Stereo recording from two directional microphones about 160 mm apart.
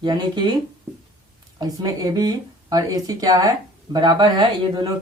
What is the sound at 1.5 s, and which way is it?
Speech, 20° right (ahead or behind).